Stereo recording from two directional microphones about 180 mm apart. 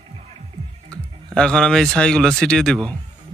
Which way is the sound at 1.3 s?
5° left (ahead or behind).